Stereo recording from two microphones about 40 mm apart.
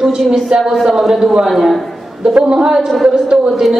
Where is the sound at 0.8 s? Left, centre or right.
Centre.